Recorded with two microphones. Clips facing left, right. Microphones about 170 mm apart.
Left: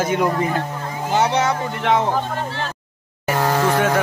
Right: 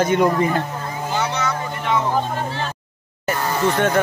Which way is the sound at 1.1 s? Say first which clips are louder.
Left 6 dB; 90° left.